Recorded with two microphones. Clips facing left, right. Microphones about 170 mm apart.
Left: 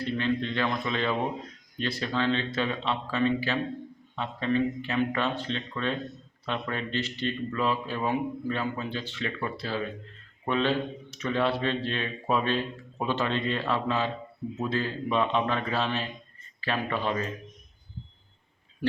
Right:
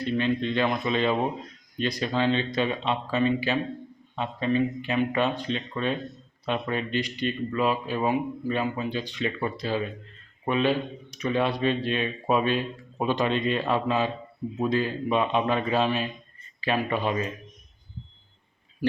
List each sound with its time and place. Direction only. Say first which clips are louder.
0.0 s speech: right 3 dB; 15° right (ahead or behind)